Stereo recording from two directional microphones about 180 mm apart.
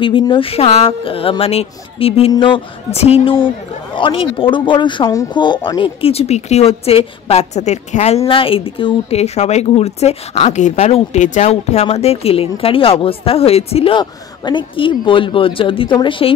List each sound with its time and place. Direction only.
0.0 s speech: 30° left (ahead or behind)